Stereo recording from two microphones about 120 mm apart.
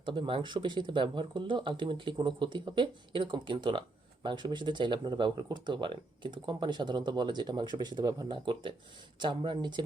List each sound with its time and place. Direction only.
0.0 s speech: 40° right (ahead or behind)